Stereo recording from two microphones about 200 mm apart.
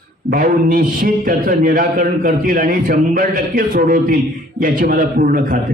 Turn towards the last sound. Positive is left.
turn(degrees=-45)  # may be behind; listen again after turning